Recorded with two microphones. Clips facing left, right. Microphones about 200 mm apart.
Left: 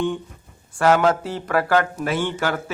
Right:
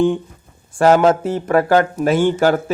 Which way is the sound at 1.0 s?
25° right (ahead or behind).